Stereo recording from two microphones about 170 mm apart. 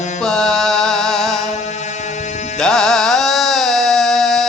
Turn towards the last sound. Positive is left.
turn(degrees=0)  # may be behind; listen again after turning